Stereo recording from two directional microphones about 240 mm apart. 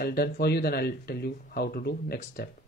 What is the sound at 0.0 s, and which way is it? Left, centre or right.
Speech, left.